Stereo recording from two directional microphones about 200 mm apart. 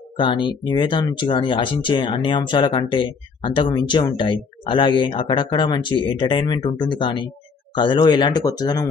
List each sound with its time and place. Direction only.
0.2 s speech: 25° left (ahead or behind)